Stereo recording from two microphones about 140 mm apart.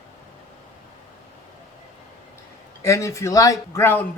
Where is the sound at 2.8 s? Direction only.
20° left (ahead or behind).